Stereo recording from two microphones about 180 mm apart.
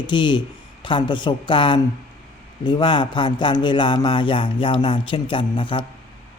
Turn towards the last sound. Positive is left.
turn(degrees=25)  # may be behind; listen again after turning